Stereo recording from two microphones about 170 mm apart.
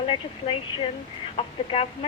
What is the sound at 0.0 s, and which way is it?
A woman's voice, 30° left (ahead or behind).